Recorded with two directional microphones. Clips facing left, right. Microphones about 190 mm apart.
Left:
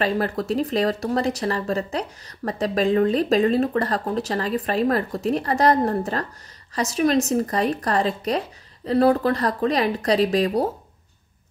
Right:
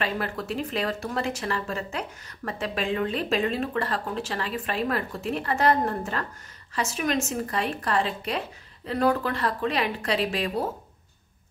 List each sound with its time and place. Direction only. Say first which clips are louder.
0.0 s speech: left 7 dB; 40° left (ahead or behind)